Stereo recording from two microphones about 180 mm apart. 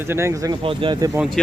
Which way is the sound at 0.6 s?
30° right (ahead or behind).